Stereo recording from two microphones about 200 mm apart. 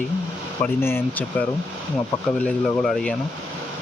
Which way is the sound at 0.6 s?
10° left (ahead or behind).